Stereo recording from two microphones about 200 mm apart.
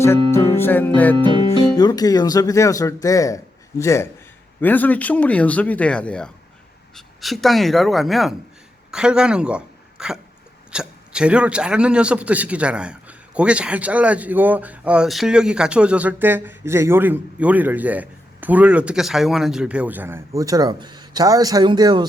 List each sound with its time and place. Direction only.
0.0 s music: 15° left (ahead or behind)
0.5 s speech: 10° left (ahead or behind)
1.2 s a woman's voice: 25° left (ahead or behind); by 22.0 s 20° right (ahead or behind)